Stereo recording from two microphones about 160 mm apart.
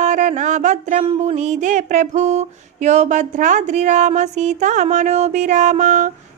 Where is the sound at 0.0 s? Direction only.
50° right (ahead or behind).